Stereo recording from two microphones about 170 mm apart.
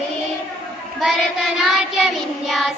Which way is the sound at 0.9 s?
Centre (ahead or behind).